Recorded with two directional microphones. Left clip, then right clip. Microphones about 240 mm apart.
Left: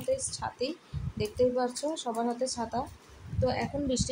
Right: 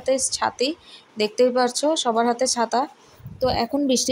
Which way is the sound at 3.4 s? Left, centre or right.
Right.